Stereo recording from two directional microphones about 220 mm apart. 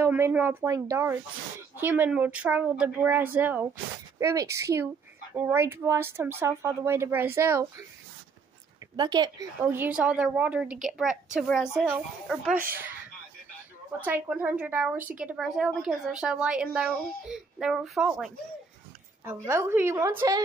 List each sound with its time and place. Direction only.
0.0 s speech: 10° right (ahead or behind)
8.9 s speech: 20° right (ahead or behind)
9.6 s a woman's voice: 10° right (ahead or behind)
14.0 s a woman's voice: 10° right (ahead or behind)
19.2 s speech: 10° right (ahead or behind)